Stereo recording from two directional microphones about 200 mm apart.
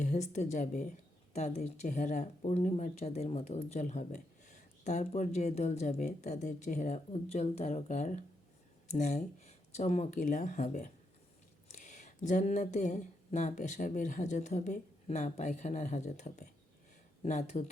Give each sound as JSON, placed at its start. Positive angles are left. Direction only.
{"t": 0.0, "sound": "speech", "side_deg": 35}